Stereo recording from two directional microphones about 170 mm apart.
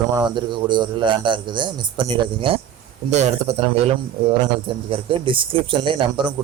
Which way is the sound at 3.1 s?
40° right (ahead or behind).